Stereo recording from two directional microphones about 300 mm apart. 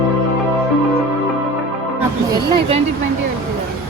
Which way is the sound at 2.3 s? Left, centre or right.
Centre.